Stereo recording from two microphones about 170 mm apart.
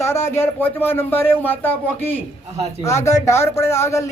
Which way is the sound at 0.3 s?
15° left (ahead or behind).